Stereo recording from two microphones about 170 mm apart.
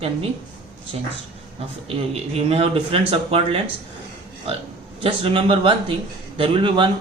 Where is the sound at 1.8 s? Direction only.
35° right (ahead or behind).